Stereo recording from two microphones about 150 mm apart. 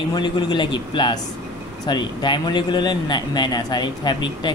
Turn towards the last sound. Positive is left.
turn(degrees=30)  # may be behind; listen again after turning